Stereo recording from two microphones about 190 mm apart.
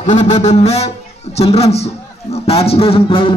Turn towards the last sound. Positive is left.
turn(degrees=30)  # may be behind; listen again after turning